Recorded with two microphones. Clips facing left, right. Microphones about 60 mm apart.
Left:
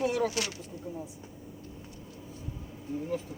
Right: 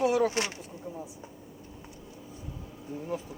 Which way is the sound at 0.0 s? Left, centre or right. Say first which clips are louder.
Right 4 dB; centre.